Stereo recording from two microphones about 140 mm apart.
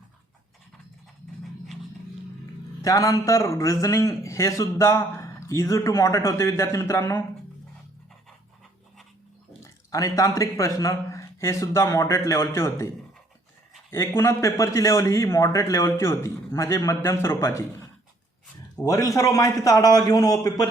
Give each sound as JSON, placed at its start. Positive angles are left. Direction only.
{"t": 2.8, "sound": "a man's voice", "side_deg": 25}
{"t": 9.6, "sound": "a man's voice", "side_deg": 25}
{"t": 13.9, "sound": "a man's voice", "side_deg": 20}
{"t": 18.9, "sound": "a man's voice", "side_deg": 25}